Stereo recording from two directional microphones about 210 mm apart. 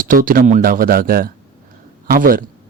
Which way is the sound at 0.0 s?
40° right (ahead or behind).